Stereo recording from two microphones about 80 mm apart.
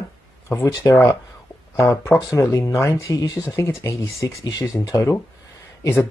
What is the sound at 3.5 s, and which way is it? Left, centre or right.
Speech, left.